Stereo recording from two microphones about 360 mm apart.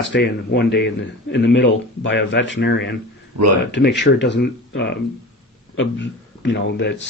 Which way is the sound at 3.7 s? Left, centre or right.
Left.